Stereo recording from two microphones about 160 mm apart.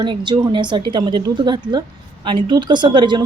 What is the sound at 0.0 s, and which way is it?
A woman's voice, 30° right (ahead or behind).